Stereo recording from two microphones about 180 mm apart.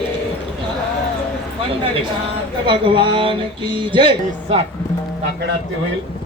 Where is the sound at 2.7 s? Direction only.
30° right (ahead or behind).